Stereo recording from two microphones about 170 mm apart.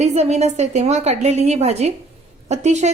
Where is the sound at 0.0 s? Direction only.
40° right (ahead or behind).